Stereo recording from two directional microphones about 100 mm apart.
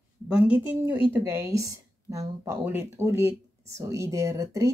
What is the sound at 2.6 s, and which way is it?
Speech, 25° right (ahead or behind).